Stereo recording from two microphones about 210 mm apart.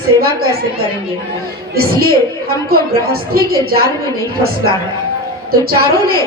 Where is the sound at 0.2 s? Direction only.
45° right (ahead or behind).